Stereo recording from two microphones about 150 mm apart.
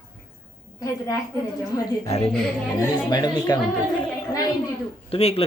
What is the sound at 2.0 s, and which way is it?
Speech, 40° left (ahead or behind).